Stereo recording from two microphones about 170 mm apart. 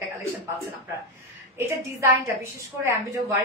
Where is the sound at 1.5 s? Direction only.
15° right (ahead or behind).